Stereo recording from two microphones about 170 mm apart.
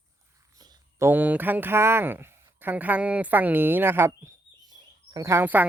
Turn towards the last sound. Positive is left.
turn(degrees=-10)  # may be behind; listen again after turning